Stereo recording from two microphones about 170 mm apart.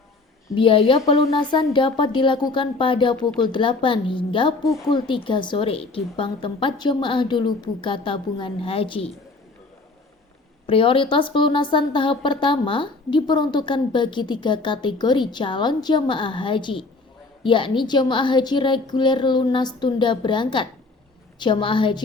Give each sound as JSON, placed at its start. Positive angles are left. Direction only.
{"t": 0.5, "sound": "a woman's voice", "side_deg": 30}
{"t": 10.7, "sound": "a woman's voice", "side_deg": 30}